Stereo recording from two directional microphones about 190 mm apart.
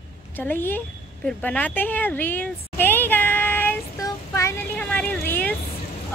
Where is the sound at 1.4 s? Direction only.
10° left (ahead or behind).